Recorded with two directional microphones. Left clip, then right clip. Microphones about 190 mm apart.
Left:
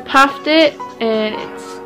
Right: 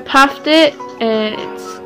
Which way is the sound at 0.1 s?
15° right (ahead or behind).